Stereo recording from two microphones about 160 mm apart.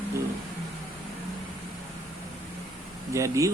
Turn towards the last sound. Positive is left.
turn(degrees=-20)  # may be behind; listen again after turning